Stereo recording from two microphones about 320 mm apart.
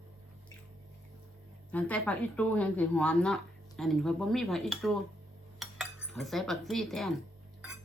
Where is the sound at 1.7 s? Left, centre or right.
Centre.